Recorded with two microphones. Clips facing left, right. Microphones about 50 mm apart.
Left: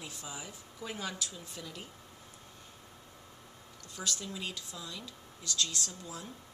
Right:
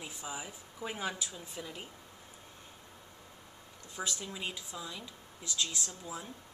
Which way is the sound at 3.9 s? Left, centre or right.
Centre.